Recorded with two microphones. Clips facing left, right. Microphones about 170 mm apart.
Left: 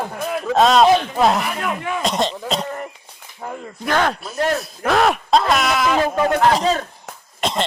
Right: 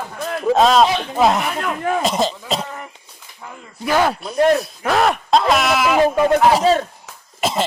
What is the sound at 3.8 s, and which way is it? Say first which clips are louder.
Speech: right 2 dB; 5° right (ahead or behind).